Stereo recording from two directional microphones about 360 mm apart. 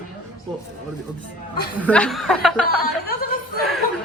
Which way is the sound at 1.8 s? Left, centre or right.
Centre.